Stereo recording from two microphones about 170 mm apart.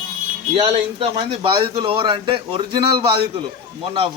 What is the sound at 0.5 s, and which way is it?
A man's voice, 35° right (ahead or behind).